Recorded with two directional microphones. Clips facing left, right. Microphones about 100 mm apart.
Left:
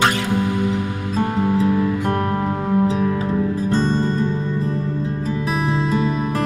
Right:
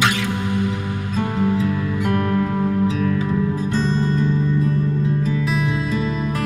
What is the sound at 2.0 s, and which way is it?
Music, 35° left (ahead or behind).